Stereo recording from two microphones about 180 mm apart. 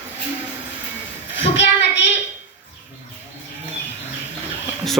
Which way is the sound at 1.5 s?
75° left (ahead or behind).